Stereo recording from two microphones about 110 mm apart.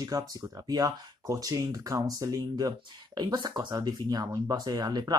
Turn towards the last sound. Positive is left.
turn(degrees=-35)  # may be behind; listen again after turning